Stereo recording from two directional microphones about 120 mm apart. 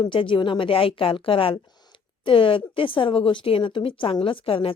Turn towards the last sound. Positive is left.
turn(degrees=50)  # may be behind; listen again after turning